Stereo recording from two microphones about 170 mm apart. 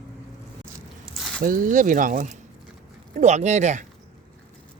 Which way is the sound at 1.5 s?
50° right (ahead or behind).